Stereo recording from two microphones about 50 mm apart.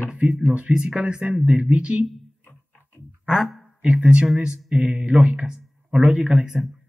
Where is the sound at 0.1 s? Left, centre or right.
Right.